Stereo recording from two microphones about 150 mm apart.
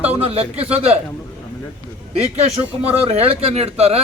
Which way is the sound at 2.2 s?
45° right (ahead or behind).